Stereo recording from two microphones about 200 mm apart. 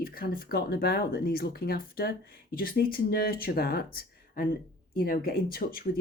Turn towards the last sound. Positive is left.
turn(degrees=50)  # may be behind; listen again after turning